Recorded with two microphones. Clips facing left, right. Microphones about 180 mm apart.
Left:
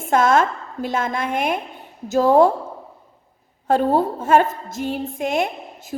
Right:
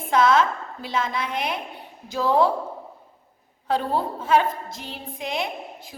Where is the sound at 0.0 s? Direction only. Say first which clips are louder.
Left 2 dB; 50° left (ahead or behind).